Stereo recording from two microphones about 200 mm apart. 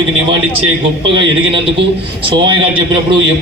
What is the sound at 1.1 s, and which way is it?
A man's voice, 25° right (ahead or behind).